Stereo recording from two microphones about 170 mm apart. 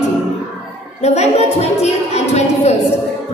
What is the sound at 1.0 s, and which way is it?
A woman's voice, 40° left (ahead or behind).